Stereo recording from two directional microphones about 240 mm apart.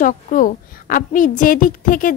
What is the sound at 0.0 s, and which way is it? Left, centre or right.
A woman's voice, left.